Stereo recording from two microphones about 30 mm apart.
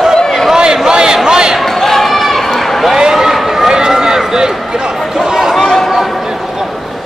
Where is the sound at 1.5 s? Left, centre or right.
Centre.